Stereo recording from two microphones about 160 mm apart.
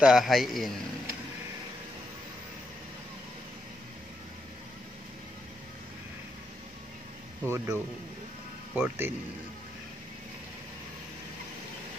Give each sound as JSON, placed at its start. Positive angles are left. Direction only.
{"t": 0.0, "sound": "a man's voice", "side_deg": 0}
{"t": 7.4, "sound": "speech", "side_deg": -15}